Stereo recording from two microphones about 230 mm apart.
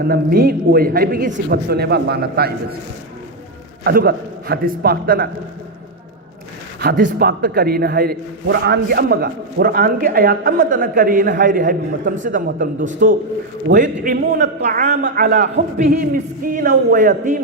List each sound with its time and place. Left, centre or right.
0.0 s a man's voice: right
3.8 s a man's voice: right
6.7 s a man's voice: right
15.1 s a man's voice: right